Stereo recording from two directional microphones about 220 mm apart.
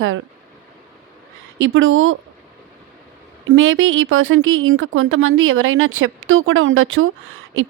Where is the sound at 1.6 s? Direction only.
60° right (ahead or behind).